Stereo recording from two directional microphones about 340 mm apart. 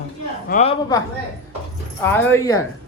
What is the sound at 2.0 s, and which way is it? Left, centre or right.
Speech, centre.